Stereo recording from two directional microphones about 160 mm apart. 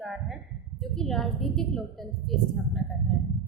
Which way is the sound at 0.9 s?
Centre (ahead or behind).